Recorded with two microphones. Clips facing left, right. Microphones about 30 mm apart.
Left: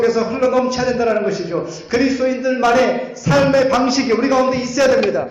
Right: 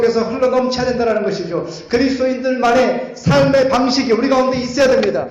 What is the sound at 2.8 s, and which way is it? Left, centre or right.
Speech, left.